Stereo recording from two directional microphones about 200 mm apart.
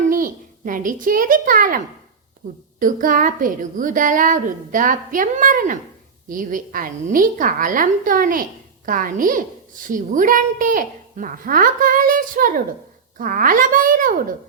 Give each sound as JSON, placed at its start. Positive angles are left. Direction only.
{"t": 0.1, "sound": "a child's voice", "side_deg": -45}